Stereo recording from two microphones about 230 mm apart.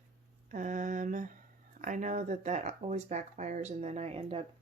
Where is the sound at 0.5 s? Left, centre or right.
Right.